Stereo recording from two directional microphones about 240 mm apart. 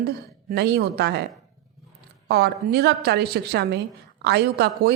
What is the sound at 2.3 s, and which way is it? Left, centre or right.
A woman's voice, right.